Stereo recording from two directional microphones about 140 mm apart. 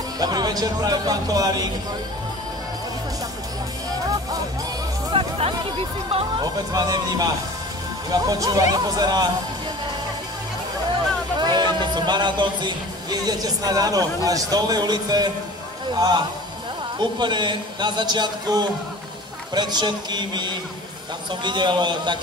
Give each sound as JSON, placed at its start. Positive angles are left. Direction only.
{"t": 0.2, "sound": "speech", "side_deg": -30}
{"t": 5.1, "sound": "speech", "side_deg": -45}
{"t": 6.4, "sound": "speech", "side_deg": -30}
{"t": 11.3, "sound": "a man's voice", "side_deg": -30}